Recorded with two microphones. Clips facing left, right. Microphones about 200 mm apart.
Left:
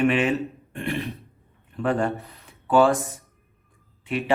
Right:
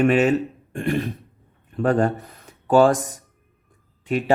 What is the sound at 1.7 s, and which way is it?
Speech, 40° right (ahead or behind).